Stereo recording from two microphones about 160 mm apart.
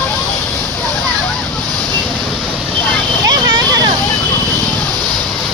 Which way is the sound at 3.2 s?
25° right (ahead or behind).